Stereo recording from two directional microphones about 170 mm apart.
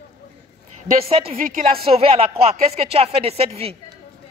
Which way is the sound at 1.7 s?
35° right (ahead or behind).